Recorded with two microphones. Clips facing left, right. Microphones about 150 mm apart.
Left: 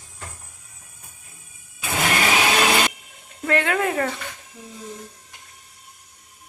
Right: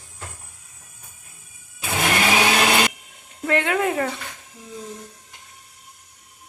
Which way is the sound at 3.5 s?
15° right (ahead or behind).